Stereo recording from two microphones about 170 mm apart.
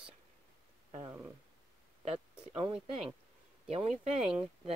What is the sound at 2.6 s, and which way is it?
Speech, 30° right (ahead or behind).